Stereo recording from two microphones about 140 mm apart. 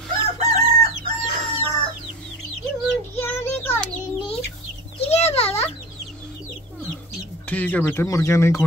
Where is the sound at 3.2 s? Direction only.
15° left (ahead or behind).